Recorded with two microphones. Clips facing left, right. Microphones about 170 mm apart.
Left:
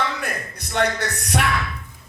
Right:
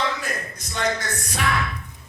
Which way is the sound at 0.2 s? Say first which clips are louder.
Left 1 dB; 65° left (ahead or behind).